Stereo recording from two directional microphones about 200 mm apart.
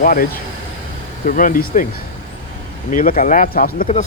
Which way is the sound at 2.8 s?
45° left (ahead or behind).